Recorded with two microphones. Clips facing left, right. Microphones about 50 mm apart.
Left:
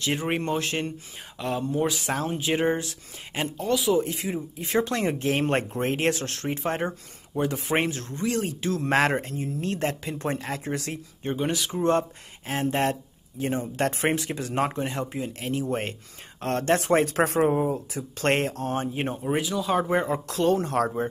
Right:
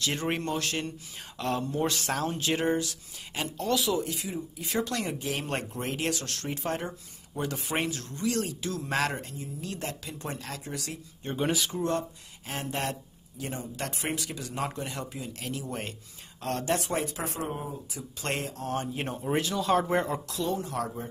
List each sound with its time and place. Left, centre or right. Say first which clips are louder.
0.0 s speech: left 3 dB; centre
1.4 s speech: left 3 dB; centre
2.8 s speech: even; left
3.5 s speech: left 3 dB; centre
3.9 s speech: left 6 dB; left
11.3 s speech: even; centre
11.7 s speech: left 6 dB; left
17.9 s speech: left 7 dB; left
18.7 s speech: left 4 dB; left
19.2 s speech: even; centre
20.2 s speech: left 8 dB; left